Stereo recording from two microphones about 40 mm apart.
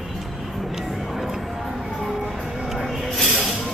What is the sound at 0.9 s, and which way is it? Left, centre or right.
Music, centre.